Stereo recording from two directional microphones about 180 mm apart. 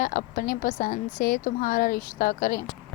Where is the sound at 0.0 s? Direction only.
50° left (ahead or behind).